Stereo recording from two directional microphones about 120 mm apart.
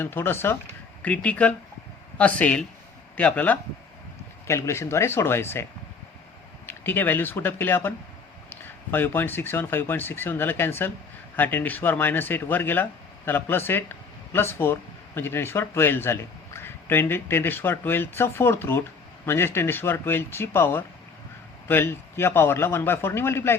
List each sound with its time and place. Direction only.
0.0 s speech: 20° left (ahead or behind)
4.4 s speech: 25° left (ahead or behind)
6.7 s speech: 15° left (ahead or behind)